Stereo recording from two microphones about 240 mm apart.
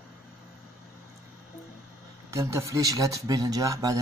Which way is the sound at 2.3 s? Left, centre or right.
Centre.